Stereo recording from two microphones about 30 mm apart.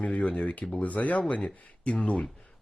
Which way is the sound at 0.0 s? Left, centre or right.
Left.